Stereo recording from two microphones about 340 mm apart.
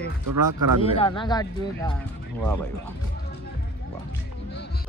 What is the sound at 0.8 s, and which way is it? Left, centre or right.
Speech, centre.